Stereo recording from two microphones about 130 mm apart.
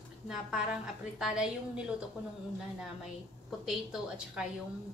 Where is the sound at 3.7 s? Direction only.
5° right (ahead or behind).